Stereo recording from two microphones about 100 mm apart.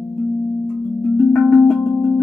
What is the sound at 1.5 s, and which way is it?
Singing bowl, centre (ahead or behind).